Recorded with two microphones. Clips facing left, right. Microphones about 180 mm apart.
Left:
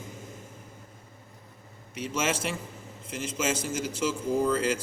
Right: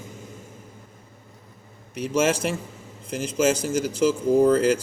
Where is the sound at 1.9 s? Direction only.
40° right (ahead or behind).